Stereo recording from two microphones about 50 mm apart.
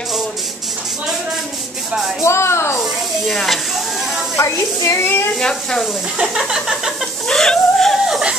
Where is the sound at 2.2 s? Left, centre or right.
Left.